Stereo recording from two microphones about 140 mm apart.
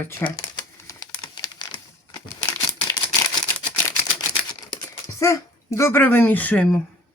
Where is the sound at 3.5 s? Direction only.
15° left (ahead or behind).